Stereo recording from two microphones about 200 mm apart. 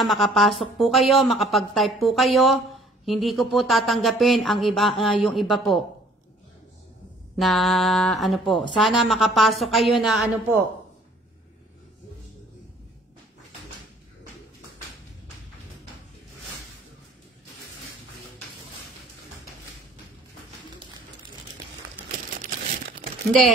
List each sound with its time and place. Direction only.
0.0 s speech: centre (ahead or behind)
7.3 s speech: centre (ahead or behind)
22.1 s a sound: 50° right (ahead or behind)